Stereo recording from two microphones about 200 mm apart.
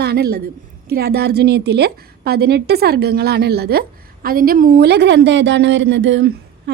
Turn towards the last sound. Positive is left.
turn(degrees=-65)  # may be behind; listen again after turning